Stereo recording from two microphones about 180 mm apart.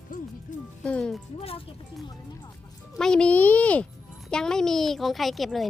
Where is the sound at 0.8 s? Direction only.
5° left (ahead or behind).